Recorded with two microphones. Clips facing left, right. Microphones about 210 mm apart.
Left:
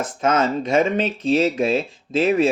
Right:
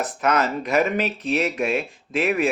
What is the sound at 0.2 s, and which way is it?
Speech, 25° left (ahead or behind).